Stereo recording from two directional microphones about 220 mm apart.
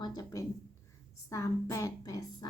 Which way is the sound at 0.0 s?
20° left (ahead or behind).